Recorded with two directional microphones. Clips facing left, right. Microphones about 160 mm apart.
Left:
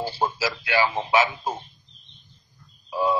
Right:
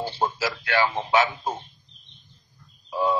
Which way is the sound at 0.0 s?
10° left (ahead or behind).